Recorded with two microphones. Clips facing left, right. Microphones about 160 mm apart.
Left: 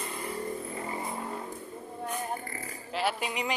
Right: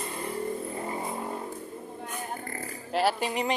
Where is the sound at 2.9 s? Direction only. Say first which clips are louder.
Right 5 dB; 40° right (ahead or behind).